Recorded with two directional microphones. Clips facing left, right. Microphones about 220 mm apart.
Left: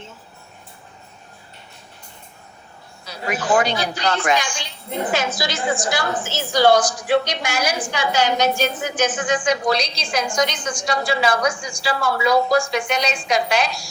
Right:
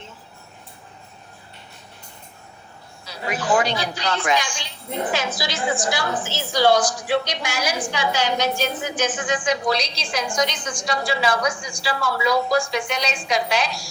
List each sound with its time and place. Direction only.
3.1 s a woman's voice: 45° left (ahead or behind)